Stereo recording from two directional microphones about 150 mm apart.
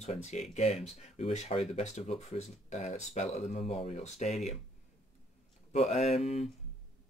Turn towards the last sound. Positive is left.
turn(degrees=45)  # may be behind; listen again after turning